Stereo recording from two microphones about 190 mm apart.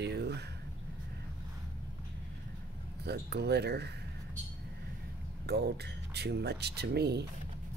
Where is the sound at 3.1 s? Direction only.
60° right (ahead or behind).